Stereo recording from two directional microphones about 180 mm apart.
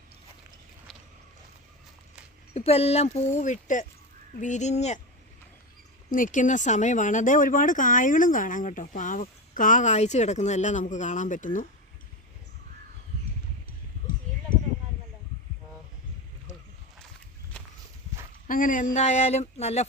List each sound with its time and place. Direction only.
2.6 s speech: 35° left (ahead or behind)
6.1 s speech: 45° left (ahead or behind)
18.4 s speech: 50° left (ahead or behind)